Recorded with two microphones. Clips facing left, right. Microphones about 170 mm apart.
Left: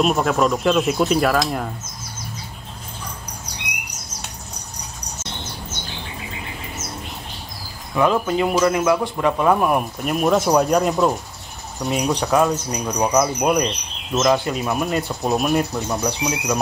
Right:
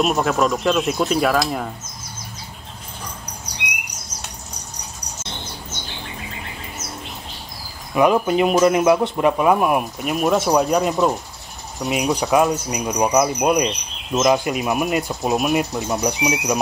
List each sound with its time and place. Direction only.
0.0 s speech: centre (ahead or behind)
7.9 s speech: 15° right (ahead or behind)